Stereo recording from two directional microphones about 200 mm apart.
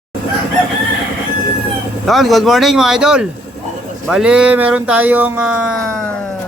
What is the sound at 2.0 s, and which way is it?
Speech, centre (ahead or behind).